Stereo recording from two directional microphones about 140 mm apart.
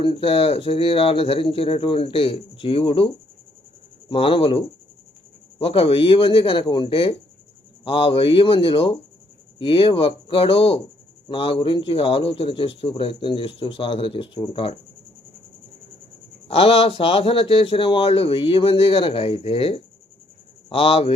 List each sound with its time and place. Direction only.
0.0 s speech: 40° left (ahead or behind)
4.1 s speech: 40° left (ahead or behind)
16.5 s speech: 45° left (ahead or behind)